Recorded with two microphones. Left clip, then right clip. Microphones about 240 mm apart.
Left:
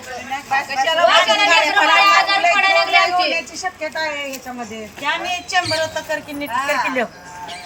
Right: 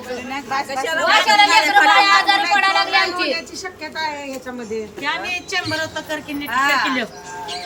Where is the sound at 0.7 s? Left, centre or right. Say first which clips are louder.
Left 3 dB; centre.